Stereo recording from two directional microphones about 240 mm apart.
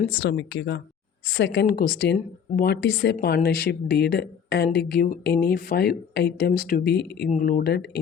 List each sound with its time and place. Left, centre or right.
0.1 s a woman's voice: left